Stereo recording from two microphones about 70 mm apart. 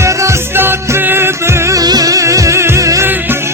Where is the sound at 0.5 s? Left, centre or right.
Right.